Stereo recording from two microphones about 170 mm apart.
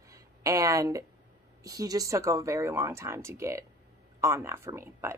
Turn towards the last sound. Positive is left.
turn(degrees=-15)  # may be behind; listen again after turning